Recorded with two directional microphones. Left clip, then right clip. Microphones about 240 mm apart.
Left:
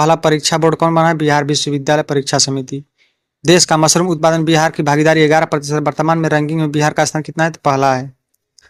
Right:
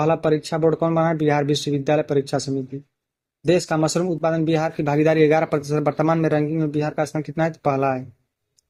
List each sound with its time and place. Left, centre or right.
0.0 s speech: left